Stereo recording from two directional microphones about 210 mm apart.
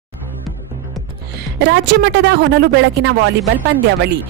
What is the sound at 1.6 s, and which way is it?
Speech, 60° right (ahead or behind).